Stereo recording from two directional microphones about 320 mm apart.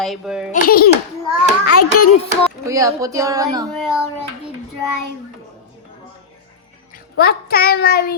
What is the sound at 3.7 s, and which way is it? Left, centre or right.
Speech, centre.